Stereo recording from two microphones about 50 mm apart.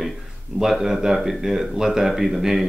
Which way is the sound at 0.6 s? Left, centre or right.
Centre.